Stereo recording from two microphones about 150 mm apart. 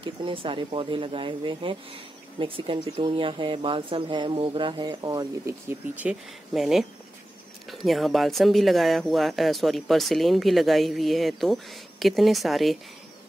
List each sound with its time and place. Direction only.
0.0 s speech: 35° right (ahead or behind)
5.7 s speech: 10° right (ahead or behind)